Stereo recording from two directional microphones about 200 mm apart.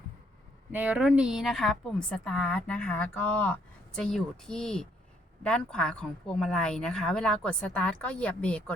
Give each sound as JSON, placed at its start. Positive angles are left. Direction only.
{"t": 0.7, "sound": "a woman's voice", "side_deg": -10}